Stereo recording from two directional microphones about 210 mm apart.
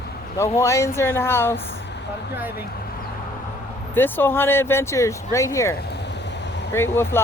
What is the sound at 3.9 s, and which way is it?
Speech, 10° left (ahead or behind).